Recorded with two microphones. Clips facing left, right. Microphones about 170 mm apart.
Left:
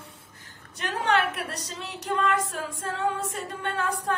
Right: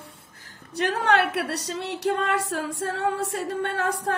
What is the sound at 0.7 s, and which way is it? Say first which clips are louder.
A woman's voice: right 3 dB; 65° right (ahead or behind).